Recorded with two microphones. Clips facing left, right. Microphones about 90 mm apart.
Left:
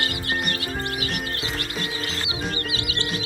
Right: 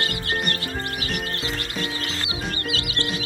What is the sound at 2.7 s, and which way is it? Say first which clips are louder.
Music: right 1 dB; 15° left (ahead or behind).